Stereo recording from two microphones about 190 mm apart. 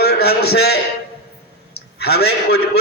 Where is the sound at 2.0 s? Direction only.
55° left (ahead or behind).